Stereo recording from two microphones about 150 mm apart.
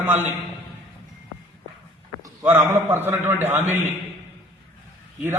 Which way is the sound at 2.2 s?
20° right (ahead or behind).